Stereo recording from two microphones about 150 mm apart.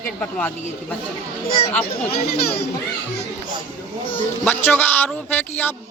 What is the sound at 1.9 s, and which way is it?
Speech, 90° left.